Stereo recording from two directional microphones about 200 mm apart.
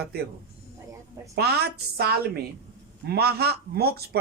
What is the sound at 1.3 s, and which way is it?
Speech, 55° right (ahead or behind).